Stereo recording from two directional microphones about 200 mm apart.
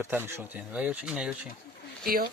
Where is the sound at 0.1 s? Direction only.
10° right (ahead or behind).